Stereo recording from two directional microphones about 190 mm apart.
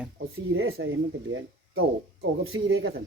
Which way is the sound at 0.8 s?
90° right.